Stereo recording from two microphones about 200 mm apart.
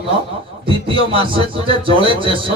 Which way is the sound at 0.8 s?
25° right (ahead or behind).